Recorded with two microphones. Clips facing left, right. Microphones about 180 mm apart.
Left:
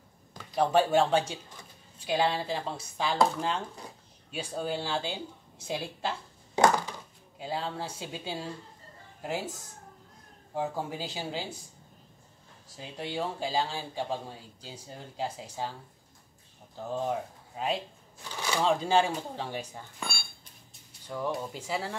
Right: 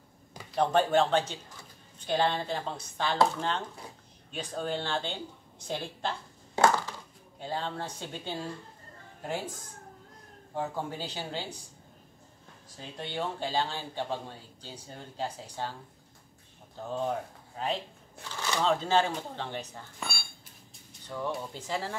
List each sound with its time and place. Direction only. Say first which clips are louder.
0.6 s a man's voice: left 1 dB; 5° left (ahead or behind)
6.5 s crushing: left 1 dB; 20° left (ahead or behind)
7.3 s a man's voice: left 1 dB; 10° left (ahead or behind)
10.5 s a man's voice: left 1 dB; 10° left (ahead or behind)
12.7 s a man's voice: left 2 dB; 10° left (ahead or behind)
16.8 s a man's voice: left 1 dB; 5° left (ahead or behind)
21.3 s speech: left 1 dB; 5° left (ahead or behind)